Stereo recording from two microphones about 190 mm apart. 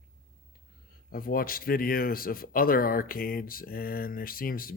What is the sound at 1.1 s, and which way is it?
Speech, 50° left (ahead or behind).